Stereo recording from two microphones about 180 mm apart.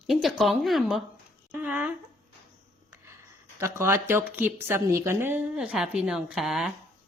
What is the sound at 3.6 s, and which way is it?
Speech, 15° right (ahead or behind).